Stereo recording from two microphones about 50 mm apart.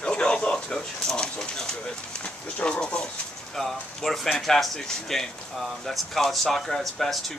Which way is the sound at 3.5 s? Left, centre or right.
Centre.